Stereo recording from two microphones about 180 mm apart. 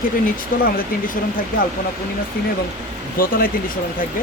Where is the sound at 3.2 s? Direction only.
50° left (ahead or behind).